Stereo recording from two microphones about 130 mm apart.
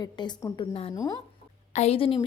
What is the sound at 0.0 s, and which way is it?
Speech, 35° left (ahead or behind).